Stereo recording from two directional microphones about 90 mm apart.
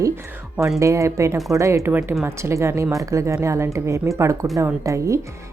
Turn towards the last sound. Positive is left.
turn(degrees=-35)  # may be behind; listen again after turning